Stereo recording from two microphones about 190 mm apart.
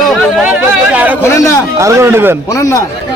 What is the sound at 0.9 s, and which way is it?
Speech, 10° right (ahead or behind).